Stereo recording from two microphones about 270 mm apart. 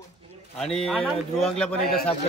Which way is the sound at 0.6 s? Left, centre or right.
Centre.